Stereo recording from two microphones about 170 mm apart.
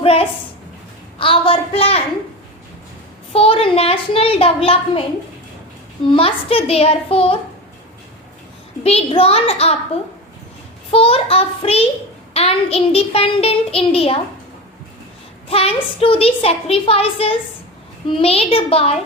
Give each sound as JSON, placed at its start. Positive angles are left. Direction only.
{"t": 0.0, "sound": "a sound", "side_deg": 35}
{"t": 3.3, "sound": "a woman's voice", "side_deg": 35}
{"t": 6.1, "sound": "a woman's voice", "side_deg": 35}
{"t": 8.8, "sound": "a woman's voice", "side_deg": 35}
{"t": 15.4, "sound": "a woman's voice", "side_deg": 35}